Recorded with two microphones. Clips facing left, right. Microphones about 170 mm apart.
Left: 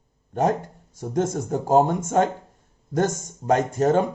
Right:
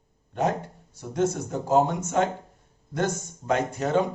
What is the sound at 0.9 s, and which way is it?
Speech, 45° left (ahead or behind).